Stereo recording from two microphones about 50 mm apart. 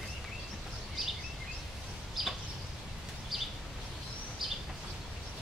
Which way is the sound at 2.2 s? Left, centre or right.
Centre.